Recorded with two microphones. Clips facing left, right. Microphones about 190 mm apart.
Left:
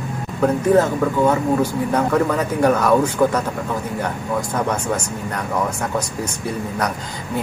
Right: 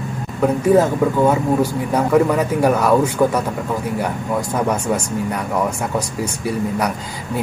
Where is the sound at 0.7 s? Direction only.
15° right (ahead or behind).